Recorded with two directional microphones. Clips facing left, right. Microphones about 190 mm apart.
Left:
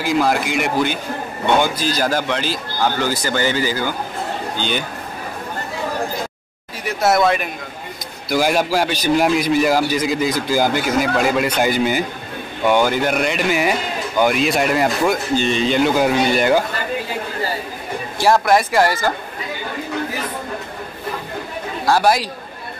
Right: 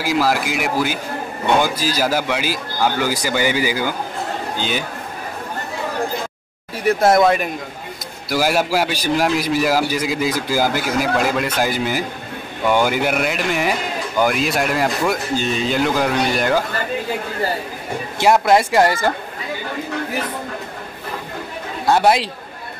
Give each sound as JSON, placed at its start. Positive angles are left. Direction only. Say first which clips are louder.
{"t": 0.0, "sound": "a man's voice", "louder": "left 1 dB", "side_deg": -5}
{"t": 8.3, "sound": "a man's voice", "louder": "left 1 dB", "side_deg": -5}
{"t": 18.2, "sound": "speech", "louder": "right 1 dB", "side_deg": -20}
{"t": 21.8, "sound": "speech", "louder": "right 1 dB", "side_deg": -25}